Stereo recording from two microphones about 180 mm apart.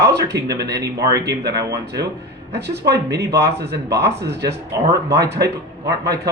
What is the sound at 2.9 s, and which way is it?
Speech, 65° right (ahead or behind).